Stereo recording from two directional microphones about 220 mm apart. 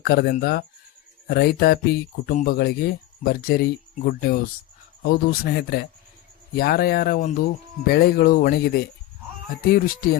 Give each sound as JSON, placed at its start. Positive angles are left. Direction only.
{"t": 0.0, "sound": "speech", "side_deg": 45}